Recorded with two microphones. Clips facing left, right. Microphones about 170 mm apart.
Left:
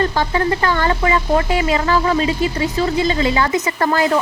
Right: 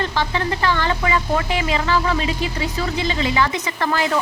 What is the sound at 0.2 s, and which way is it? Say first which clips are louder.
Speech: left 4 dB; 45° left (ahead or behind).